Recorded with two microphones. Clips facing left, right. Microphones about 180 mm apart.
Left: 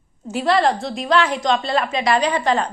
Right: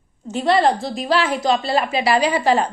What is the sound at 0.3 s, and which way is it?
A woman's voice, centre (ahead or behind).